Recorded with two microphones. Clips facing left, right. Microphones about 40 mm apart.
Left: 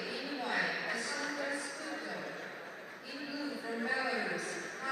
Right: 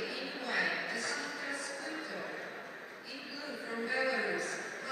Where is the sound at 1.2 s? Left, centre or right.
Centre.